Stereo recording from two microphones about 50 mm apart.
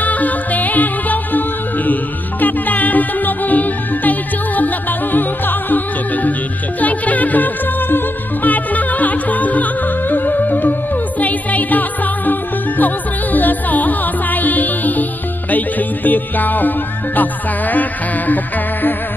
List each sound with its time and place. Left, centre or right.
0.0 s music: left
2.4 s music: left
6.8 s music: left